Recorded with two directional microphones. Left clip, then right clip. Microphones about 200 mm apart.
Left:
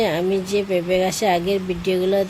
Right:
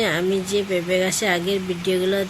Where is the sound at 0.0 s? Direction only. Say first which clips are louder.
Left 1 dB; 20° left (ahead or behind).